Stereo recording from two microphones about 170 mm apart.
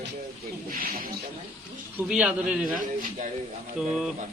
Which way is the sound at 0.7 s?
60° right (ahead or behind).